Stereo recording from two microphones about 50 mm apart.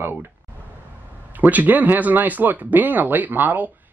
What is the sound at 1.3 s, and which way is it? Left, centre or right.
Speech, right.